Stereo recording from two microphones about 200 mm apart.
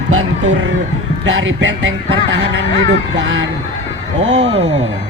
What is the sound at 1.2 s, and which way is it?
Speech, 70° right (ahead or behind).